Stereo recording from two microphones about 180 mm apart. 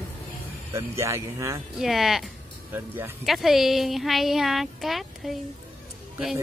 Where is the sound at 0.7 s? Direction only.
15° right (ahead or behind).